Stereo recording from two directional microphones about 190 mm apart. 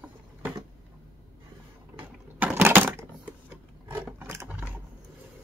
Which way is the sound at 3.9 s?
10° right (ahead or behind).